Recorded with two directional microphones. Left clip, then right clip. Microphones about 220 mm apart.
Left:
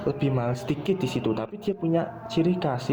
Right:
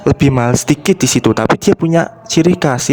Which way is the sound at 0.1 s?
55° right (ahead or behind).